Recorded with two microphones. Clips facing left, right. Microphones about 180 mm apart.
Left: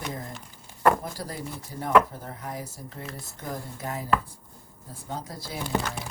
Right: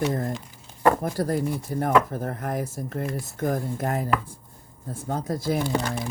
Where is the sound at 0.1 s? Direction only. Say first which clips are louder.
Right 9 dB; 50° right (ahead or behind).